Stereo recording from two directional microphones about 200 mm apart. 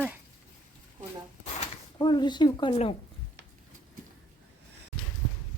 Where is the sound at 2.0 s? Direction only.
20° left (ahead or behind).